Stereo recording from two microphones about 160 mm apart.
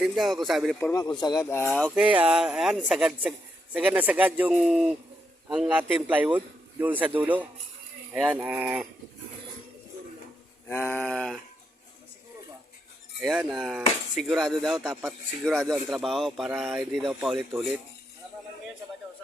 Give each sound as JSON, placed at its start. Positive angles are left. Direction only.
{"t": 0.0, "sound": "speech", "side_deg": 0}
{"t": 0.9, "sound": "speech", "side_deg": 25}
{"t": 1.5, "sound": "a sound", "side_deg": 10}
{"t": 2.0, "sound": "a man's voice", "side_deg": -5}
{"t": 10.7, "sound": "a sound", "side_deg": 10}
{"t": 13.2, "sound": "speech", "side_deg": 0}